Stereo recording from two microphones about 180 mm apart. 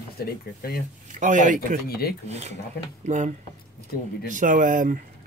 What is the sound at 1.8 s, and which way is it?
Speech, 60° left (ahead or behind).